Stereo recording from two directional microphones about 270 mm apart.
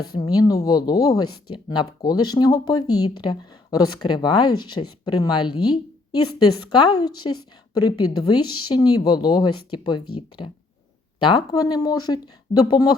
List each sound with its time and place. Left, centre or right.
0.2 s speech: centre
6.7 s speech: centre
10.0 s speech: left
11.2 s speech: centre